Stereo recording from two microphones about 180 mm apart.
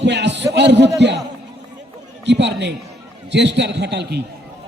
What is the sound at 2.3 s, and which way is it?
A man's voice, 75° right (ahead or behind).